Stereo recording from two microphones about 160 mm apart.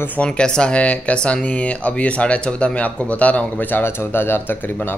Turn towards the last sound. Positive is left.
turn(degrees=10)  # may be behind; listen again after turning